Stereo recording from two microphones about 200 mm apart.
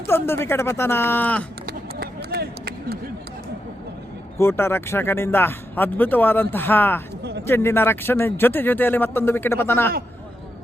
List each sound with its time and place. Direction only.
0.1 s speech: 10° left (ahead or behind)
1.6 s a sound: 50° right (ahead or behind)
4.4 s speech: 10° left (ahead or behind)